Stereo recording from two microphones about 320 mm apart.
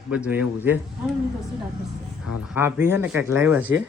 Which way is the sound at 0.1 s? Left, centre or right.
Centre.